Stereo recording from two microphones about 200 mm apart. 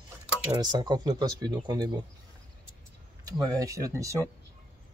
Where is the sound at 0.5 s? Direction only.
20° right (ahead or behind).